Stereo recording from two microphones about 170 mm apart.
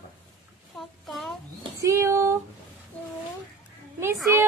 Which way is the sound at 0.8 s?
Centre (ahead or behind).